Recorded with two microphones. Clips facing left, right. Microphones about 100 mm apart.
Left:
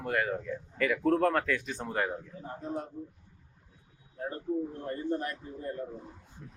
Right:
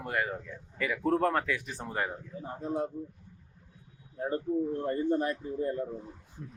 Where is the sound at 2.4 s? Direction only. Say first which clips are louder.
Right 5 dB; 25° right (ahead or behind).